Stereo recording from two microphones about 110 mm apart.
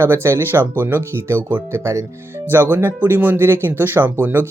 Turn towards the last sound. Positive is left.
turn(degrees=-20)  # may be behind; listen again after turning